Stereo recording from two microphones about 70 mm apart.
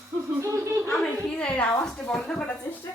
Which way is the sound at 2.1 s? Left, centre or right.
Centre.